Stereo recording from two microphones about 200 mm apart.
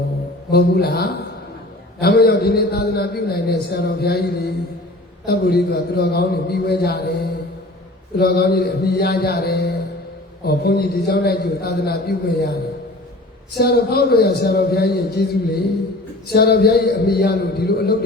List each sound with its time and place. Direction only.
0.5 s a man's voice: 50° left (ahead or behind)
13.6 s a man's voice: 55° left (ahead or behind)